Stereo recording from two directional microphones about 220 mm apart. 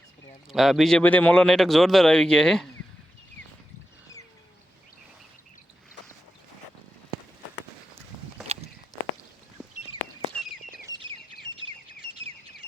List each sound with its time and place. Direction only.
0.5 s speech: centre (ahead or behind)
8.5 s walk: 30° right (ahead or behind)
10.8 s bird: 20° right (ahead or behind)